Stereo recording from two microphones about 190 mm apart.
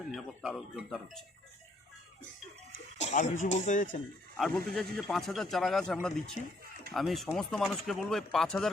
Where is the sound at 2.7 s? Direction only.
40° left (ahead or behind).